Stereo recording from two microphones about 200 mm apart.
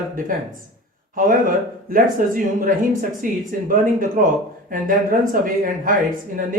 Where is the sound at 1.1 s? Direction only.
45° right (ahead or behind).